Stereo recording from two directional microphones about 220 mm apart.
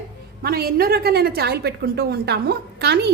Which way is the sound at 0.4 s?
45° right (ahead or behind).